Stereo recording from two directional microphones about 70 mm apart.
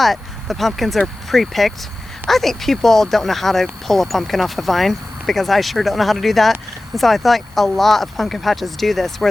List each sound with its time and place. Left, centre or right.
0.0 s speech: centre